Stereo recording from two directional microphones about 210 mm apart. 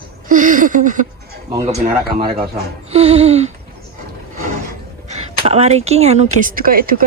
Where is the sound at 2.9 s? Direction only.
30° right (ahead or behind).